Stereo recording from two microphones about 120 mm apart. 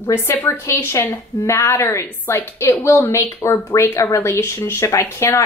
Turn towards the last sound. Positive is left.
turn(degrees=20)  # may be behind; listen again after turning